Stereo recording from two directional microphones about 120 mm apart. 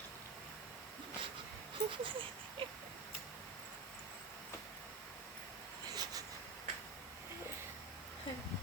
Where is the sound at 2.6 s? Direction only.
50° right (ahead or behind).